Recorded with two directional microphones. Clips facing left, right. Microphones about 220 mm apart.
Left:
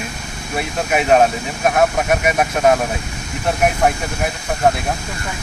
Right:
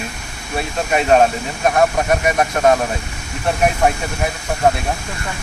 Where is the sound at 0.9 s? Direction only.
5° left (ahead or behind).